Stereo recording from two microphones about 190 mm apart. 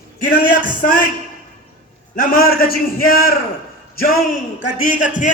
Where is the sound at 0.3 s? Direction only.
50° left (ahead or behind).